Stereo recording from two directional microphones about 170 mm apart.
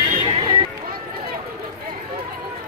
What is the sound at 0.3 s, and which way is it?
Music, 30° right (ahead or behind).